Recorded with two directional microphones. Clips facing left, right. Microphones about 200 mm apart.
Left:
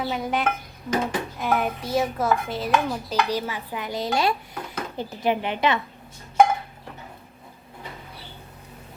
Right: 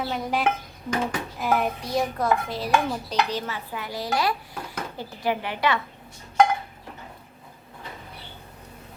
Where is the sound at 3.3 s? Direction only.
15° left (ahead or behind).